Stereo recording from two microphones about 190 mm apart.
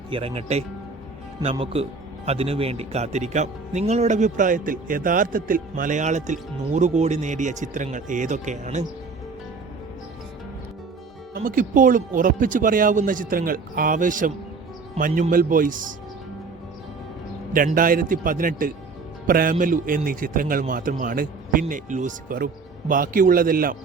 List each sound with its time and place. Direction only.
0.1 s speech: 30° right (ahead or behind)
11.3 s a man's voice: 45° right (ahead or behind)
17.5 s a man's voice: 45° right (ahead or behind)